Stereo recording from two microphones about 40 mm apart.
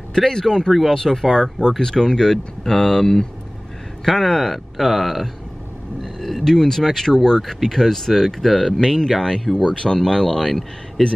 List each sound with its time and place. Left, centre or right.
0.1 s speech: centre